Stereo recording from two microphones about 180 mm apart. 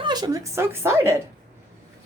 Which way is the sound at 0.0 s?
20° right (ahead or behind).